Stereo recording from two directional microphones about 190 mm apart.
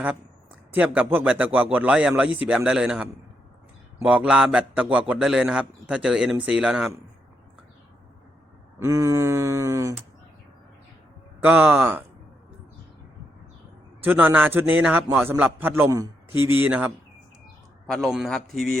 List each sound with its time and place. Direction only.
0.7 s a man's voice: 10° right (ahead or behind)
8.8 s a man's voice: 15° right (ahead or behind)
11.3 s a man's voice: 10° right (ahead or behind)
14.0 s a man's voice: 10° right (ahead or behind)
17.9 s a man's voice: centre (ahead or behind)